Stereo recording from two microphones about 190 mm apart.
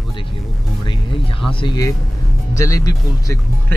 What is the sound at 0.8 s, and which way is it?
Music, 25° left (ahead or behind).